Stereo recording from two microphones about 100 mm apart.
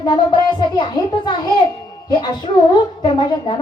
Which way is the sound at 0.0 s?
45° left (ahead or behind).